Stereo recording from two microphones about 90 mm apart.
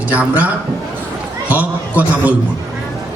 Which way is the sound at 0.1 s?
15° right (ahead or behind).